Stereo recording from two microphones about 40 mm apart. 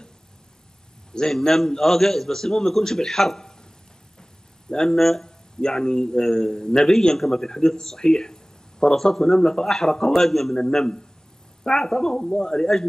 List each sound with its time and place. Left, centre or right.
1.1 s a man's voice: centre
4.2 s a sound: centre
5.6 s a man's voice: centre